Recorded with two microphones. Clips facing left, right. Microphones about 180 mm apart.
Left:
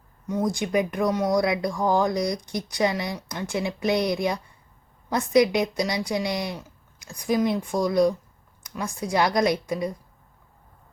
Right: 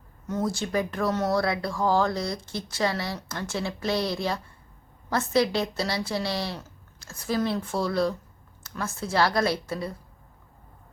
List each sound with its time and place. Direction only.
0.3 s speech: 15° left (ahead or behind)